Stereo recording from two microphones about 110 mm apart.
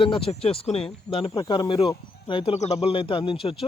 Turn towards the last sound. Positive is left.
turn(degrees=55)  # may be behind; listen again after turning